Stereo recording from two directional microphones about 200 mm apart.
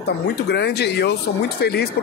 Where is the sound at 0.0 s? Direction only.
55° left (ahead or behind).